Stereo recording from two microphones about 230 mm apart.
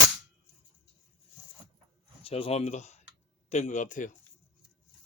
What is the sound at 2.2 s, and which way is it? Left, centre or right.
Speech, left.